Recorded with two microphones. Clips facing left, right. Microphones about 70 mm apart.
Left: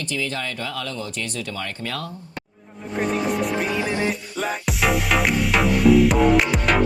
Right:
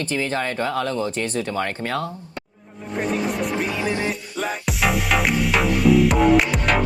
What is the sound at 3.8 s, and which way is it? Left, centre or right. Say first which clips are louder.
Music: even; right.